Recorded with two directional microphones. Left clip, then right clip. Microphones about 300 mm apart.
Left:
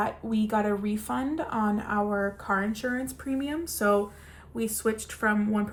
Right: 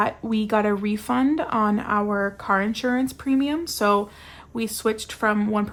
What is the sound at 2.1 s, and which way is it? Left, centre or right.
Speech, centre.